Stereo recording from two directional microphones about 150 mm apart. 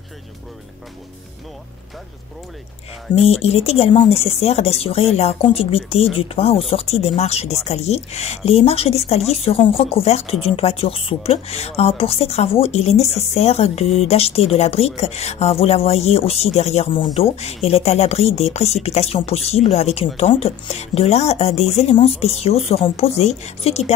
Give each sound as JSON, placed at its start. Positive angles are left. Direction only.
{"t": 3.3, "sound": "a woman's voice", "side_deg": 40}